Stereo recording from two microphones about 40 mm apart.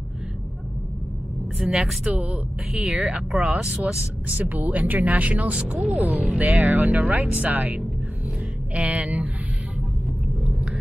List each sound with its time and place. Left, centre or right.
1.6 s speech: centre
2.0 s speech: right
2.7 s speech: centre
3.0 s speech: right
4.4 s speech: right
5.5 s speech: right
5.8 s speech: right
8.7 s speech: right